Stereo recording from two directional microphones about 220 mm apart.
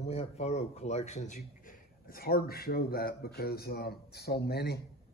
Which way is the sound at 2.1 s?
45° left (ahead or behind).